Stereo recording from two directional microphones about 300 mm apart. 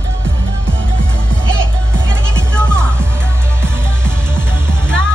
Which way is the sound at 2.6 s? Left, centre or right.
Centre.